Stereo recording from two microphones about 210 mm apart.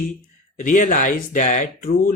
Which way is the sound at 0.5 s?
40° left (ahead or behind).